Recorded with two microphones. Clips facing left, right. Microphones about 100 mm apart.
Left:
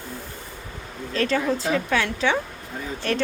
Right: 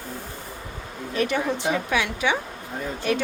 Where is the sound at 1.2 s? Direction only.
15° right (ahead or behind).